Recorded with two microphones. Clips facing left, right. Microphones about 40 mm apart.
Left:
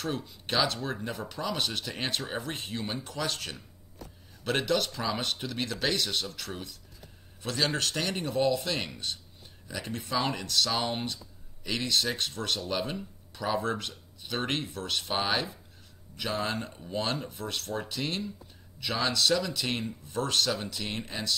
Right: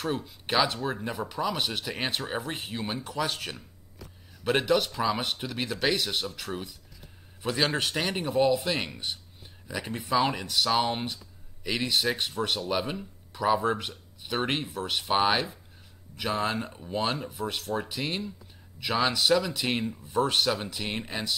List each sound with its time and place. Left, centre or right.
0.0 s speech: centre